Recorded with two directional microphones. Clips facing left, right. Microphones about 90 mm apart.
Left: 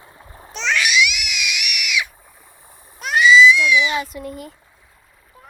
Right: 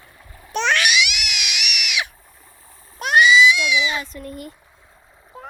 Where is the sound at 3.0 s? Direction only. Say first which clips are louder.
Left 1 dB; 65° right (ahead or behind).